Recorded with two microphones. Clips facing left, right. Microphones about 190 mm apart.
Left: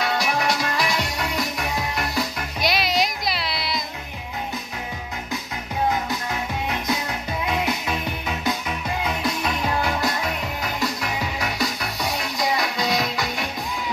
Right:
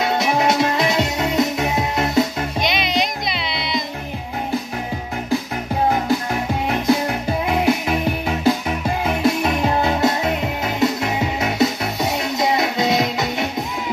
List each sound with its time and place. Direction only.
0.0 s music: 25° right (ahead or behind)
2.6 s music: 5° left (ahead or behind)
6.7 s music: 30° right (ahead or behind)